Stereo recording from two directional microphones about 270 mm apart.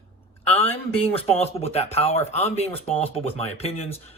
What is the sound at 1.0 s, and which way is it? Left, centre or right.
Speech, left.